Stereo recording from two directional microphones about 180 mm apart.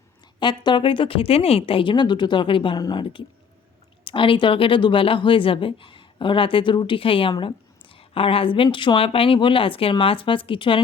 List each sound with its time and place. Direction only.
0.3 s speech: 25° left (ahead or behind)